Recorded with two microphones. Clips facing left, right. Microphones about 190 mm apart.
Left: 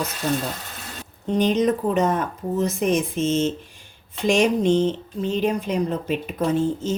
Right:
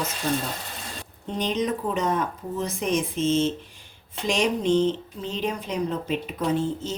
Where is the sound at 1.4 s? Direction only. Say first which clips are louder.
Left 6 dB; 45° left (ahead or behind).